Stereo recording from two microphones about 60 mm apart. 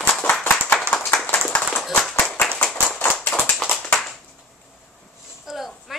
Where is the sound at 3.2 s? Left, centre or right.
Centre.